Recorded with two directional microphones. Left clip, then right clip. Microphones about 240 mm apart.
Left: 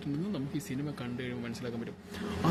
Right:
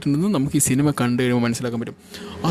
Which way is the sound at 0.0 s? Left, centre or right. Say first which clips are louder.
Right 15 dB; right.